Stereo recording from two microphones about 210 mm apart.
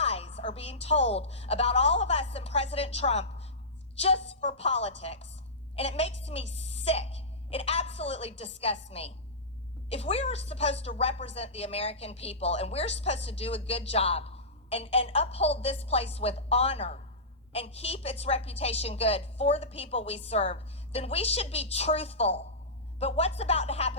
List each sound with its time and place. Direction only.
0.0 s a woman's voice: 30° left (ahead or behind)